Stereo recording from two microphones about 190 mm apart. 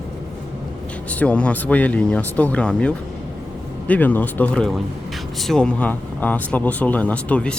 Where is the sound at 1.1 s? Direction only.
5° left (ahead or behind).